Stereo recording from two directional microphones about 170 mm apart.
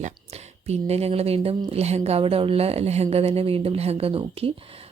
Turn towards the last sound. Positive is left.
turn(degrees=-35)  # may be behind; listen again after turning